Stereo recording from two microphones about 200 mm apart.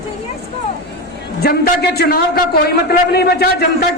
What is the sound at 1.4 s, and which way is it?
A man's voice, 50° left (ahead or behind).